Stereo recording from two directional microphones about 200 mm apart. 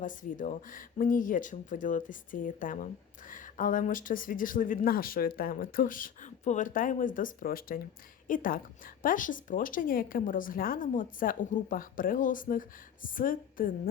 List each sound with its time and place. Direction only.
0.0 s speech: 40° left (ahead or behind)